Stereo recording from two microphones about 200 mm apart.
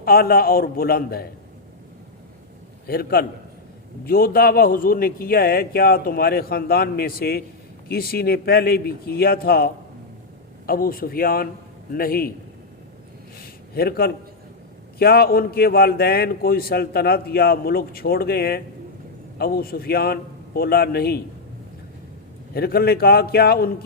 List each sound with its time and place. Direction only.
0.0 s a man's voice: 50° left (ahead or behind)
2.8 s a man's voice: 50° left (ahead or behind)
13.7 s a man's voice: 50° left (ahead or behind)
22.5 s a man's voice: 50° left (ahead or behind)